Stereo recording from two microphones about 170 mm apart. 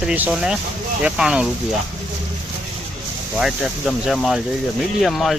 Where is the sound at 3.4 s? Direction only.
Centre (ahead or behind).